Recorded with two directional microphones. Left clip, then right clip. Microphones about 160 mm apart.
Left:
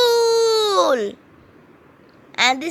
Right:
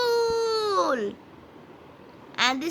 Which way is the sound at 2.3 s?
40° left (ahead or behind).